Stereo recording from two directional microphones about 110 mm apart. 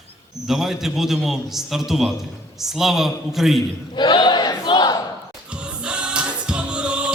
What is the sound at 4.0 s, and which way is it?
Battle cry, 45° left (ahead or behind).